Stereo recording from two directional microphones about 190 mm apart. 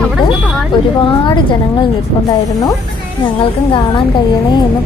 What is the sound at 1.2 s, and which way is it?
Speech, 25° left (ahead or behind).